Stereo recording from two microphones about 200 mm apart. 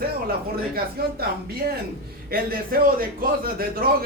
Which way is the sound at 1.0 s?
50° right (ahead or behind).